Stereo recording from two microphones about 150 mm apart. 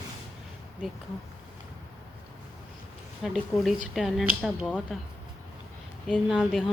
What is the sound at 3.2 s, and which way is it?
A woman's voice, centre (ahead or behind).